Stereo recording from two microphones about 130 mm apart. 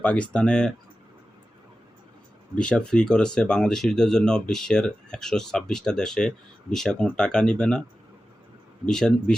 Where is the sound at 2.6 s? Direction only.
5° left (ahead or behind).